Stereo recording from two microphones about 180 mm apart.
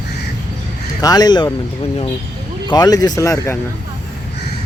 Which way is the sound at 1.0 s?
20° left (ahead or behind).